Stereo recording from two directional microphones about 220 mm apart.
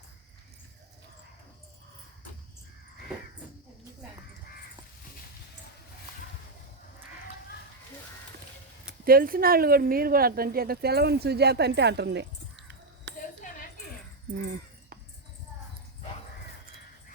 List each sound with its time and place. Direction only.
9.0 s a woman's voice: 40° right (ahead or behind)